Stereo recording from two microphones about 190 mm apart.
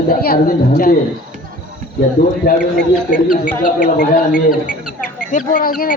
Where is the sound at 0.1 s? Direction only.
50° left (ahead or behind).